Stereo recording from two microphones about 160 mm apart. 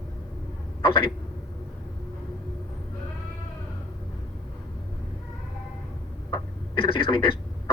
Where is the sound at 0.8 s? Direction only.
35° left (ahead or behind).